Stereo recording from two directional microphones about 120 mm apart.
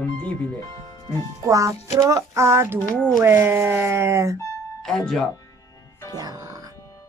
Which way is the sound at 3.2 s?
20° right (ahead or behind).